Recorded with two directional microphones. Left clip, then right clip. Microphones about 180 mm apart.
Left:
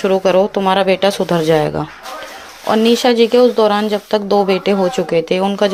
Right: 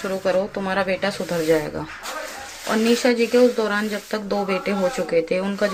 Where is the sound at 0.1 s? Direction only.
45° left (ahead or behind).